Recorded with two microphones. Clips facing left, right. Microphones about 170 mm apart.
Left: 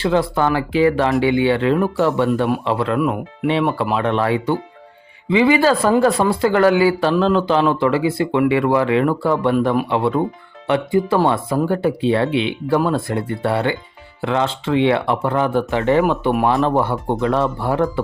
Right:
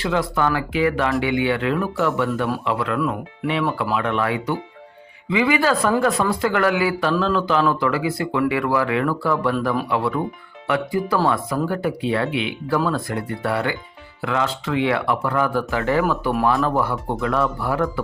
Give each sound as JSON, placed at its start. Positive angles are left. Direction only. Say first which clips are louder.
{"t": 0.0, "sound": "speech", "louder": "left 4 dB", "side_deg": 30}